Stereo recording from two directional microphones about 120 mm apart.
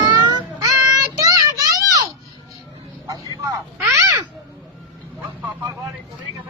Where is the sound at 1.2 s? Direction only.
30° right (ahead or behind).